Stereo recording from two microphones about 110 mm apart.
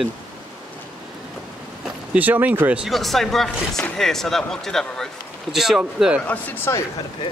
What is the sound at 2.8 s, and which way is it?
Speech, centre (ahead or behind).